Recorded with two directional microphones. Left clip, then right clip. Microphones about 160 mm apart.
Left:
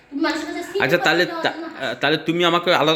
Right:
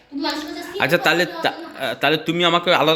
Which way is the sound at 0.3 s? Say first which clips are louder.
Even; centre (ahead or behind).